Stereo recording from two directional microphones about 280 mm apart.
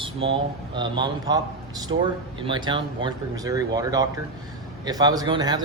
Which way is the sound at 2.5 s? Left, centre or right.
Centre.